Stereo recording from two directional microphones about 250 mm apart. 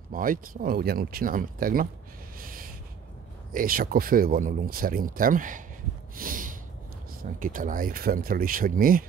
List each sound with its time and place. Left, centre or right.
0.1 s speech: right
2.3 s snort: right
3.5 s speech: right
6.1 s snort: right
7.3 s speech: right